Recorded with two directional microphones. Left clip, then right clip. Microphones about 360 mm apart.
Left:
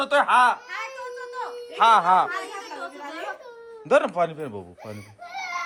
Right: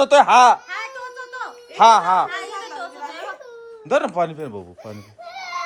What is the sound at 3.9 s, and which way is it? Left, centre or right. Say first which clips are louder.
Speech: right 1 dB; centre.